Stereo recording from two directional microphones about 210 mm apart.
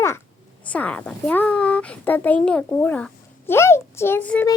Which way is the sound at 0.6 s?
5° left (ahead or behind).